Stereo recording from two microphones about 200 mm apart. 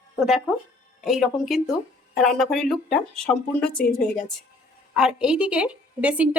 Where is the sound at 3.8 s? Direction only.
45° left (ahead or behind).